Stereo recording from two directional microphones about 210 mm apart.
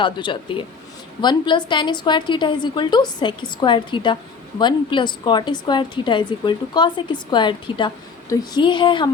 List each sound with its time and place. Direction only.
0.0 s a woman's voice: 25° left (ahead or behind)